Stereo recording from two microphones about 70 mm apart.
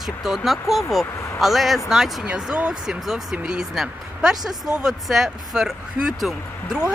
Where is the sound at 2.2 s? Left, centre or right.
Centre.